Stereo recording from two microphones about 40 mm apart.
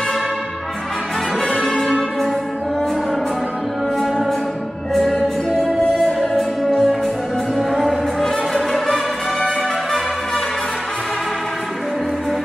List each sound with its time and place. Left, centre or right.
1.5 s music: left
1.8 s music: centre
5.9 s music: centre
7.5 s music: centre